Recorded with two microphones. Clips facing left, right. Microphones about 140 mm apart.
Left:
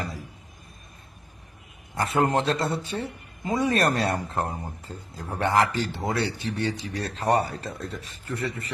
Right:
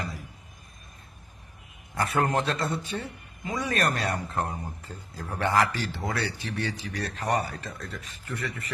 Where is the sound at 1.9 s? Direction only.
25° left (ahead or behind).